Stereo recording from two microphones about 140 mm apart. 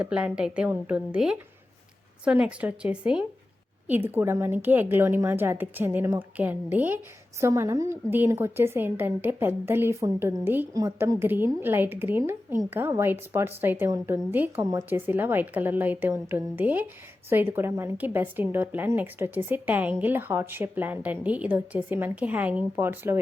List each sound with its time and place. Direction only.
0.0 s a woman's voice: 10° right (ahead or behind)